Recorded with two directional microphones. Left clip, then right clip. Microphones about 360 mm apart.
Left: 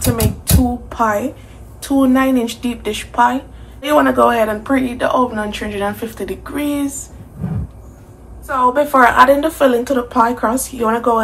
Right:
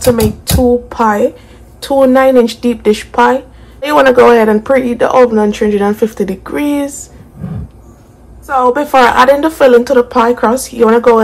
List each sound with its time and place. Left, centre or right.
0.8 s a sound: right
1.8 s speech: right
8.5 s speech: centre